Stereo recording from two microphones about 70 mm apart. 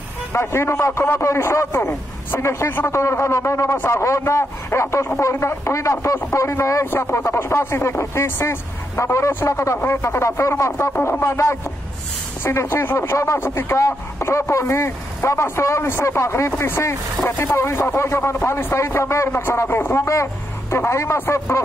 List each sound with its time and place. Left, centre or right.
0.3 s a man's voice: left